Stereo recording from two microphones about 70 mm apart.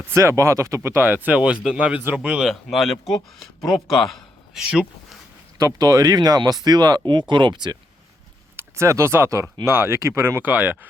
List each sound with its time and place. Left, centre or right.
0.0 s speech: right; by 2.5 s centre
2.5 s speech: centre
4.5 s speech: centre
5.5 s speech: right
8.5 s speech: right